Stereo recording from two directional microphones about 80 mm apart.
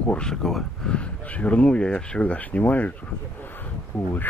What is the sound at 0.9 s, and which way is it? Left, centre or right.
Speech, centre.